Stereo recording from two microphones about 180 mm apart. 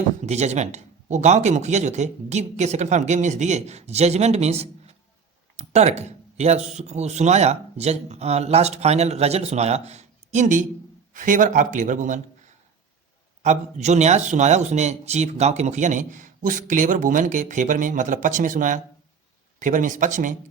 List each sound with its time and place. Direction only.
0.2 s speech: 40° right (ahead or behind)
13.4 s speech: 40° right (ahead or behind)